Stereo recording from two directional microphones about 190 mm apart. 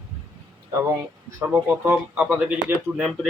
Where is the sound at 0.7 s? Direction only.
15° right (ahead or behind).